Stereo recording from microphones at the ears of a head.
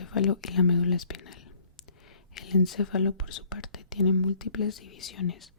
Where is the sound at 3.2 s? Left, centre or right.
Left.